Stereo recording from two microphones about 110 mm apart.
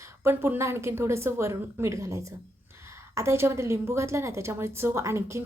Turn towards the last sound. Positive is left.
turn(degrees=-25)  # may be behind; listen again after turning